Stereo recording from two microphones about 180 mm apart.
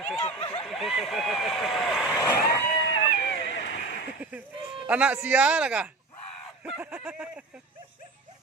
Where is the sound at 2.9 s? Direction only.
80° left.